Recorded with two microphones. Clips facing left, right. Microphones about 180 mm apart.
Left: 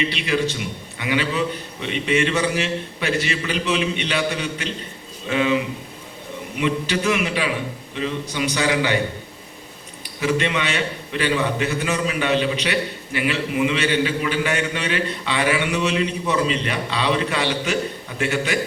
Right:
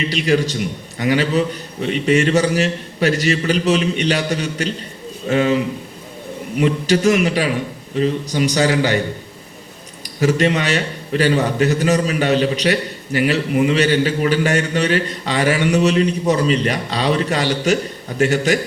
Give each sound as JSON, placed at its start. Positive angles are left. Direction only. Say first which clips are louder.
{"t": 0.1, "sound": "a man's voice", "louder": "right 5 dB", "side_deg": -40}
{"t": 6.6, "sound": "a man's voice", "louder": "right 6 dB", "side_deg": -45}
{"t": 10.2, "sound": "a man's voice", "louder": "right 5 dB", "side_deg": -40}